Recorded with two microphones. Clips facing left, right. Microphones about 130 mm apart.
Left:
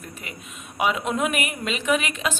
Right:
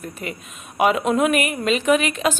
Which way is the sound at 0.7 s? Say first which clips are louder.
Right 6 dB; 50° right (ahead or behind).